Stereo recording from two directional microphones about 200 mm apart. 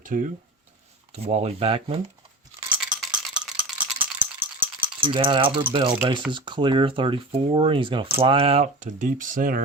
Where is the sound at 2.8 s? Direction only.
5° right (ahead or behind).